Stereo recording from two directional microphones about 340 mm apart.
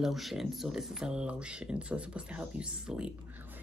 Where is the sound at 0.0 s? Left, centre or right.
Centre.